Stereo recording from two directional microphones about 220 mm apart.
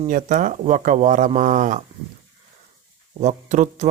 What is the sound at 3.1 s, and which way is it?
Speech, 30° right (ahead or behind).